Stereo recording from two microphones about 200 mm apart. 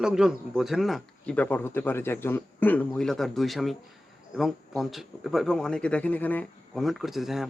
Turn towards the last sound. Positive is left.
turn(degrees=0)  # may be behind; listen again after turning